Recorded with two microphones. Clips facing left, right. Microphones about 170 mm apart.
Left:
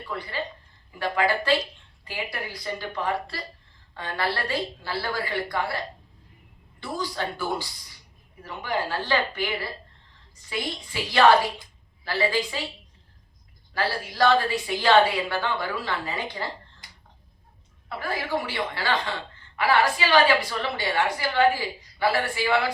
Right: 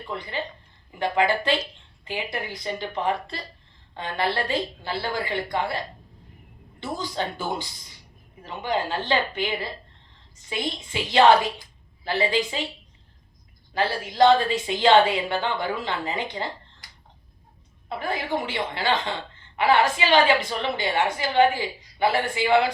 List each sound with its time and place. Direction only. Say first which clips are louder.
0.1 s a woman's voice: right 1 dB; 20° right (ahead or behind)
13.7 s a woman's voice: right 4 dB; 20° right (ahead or behind)
17.8 s a woman's voice: right 2 dB; 20° right (ahead or behind)